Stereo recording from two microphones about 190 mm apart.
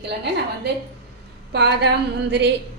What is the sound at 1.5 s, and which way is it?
A woman's voice, 60° right (ahead or behind).